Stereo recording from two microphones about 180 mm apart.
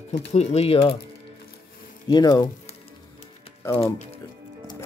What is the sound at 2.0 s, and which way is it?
Speech, 25° left (ahead or behind).